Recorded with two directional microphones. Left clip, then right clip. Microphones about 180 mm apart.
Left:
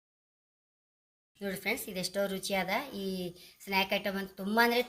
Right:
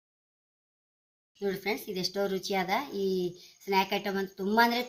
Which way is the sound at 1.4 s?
40° left (ahead or behind).